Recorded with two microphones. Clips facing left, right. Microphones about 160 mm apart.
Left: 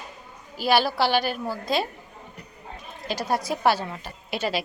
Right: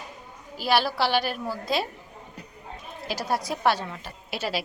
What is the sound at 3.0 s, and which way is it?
A woman's voice, centre (ahead or behind).